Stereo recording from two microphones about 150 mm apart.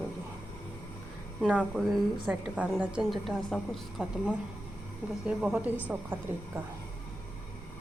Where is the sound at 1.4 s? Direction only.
5° right (ahead or behind).